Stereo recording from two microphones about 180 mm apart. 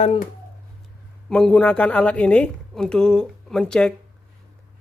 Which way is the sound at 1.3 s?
5° left (ahead or behind).